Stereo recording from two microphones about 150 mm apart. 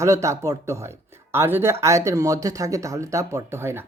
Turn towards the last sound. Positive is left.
turn(degrees=-15)  # may be behind; listen again after turning